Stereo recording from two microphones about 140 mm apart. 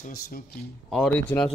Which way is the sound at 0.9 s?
5° left (ahead or behind).